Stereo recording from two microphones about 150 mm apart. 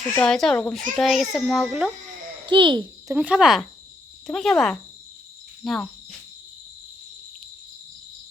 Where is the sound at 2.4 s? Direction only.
30° right (ahead or behind).